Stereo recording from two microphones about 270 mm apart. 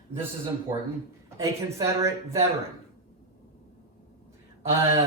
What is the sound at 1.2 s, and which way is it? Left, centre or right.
Speech, centre.